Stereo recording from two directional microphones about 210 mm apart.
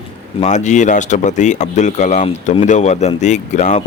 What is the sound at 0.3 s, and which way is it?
Speech, 35° left (ahead or behind).